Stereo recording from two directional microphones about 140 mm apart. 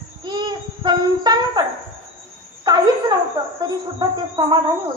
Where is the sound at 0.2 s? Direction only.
30° right (ahead or behind).